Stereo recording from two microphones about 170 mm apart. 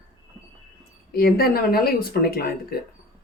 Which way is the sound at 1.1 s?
65° left (ahead or behind).